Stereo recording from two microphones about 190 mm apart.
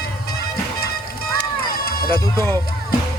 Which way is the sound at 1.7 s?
55° left (ahead or behind).